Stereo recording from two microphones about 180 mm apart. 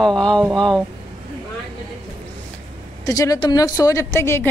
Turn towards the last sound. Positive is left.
turn(degrees=15)  # may be behind; listen again after turning